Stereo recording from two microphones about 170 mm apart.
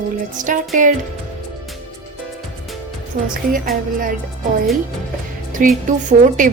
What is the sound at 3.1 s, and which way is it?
Speech, 55° right (ahead or behind).